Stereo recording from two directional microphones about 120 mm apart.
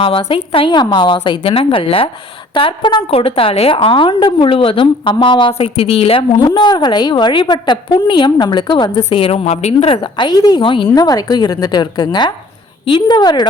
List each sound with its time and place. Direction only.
0.0 s a woman's voice: 45° left (ahead or behind)
6.4 s a woman's voice: 35° left (ahead or behind)
9.0 s a woman's voice: 55° left (ahead or behind)
10.9 s a woman's voice: 35° left (ahead or behind)